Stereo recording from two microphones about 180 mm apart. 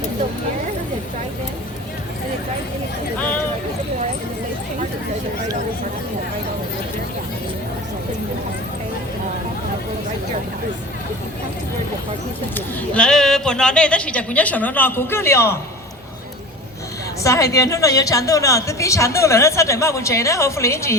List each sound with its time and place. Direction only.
12.5 s a woman's voice: 5° left (ahead or behind)
17.2 s a woman's voice: 20° left (ahead or behind)